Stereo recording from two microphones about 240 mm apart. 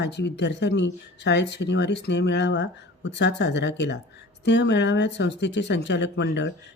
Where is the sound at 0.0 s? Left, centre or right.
Left.